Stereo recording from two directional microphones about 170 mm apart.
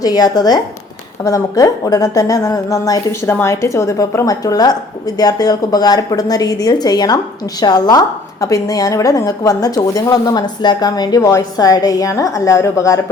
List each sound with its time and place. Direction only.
0.0 s a woman's voice: 20° left (ahead or behind)